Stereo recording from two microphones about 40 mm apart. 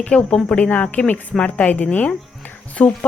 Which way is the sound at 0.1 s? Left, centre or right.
Left.